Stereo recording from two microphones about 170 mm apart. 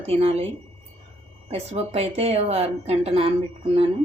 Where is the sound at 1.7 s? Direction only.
40° right (ahead or behind).